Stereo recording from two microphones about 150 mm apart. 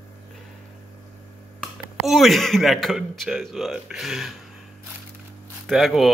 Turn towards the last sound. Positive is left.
turn(degrees=0)  # may be behind; listen again after turning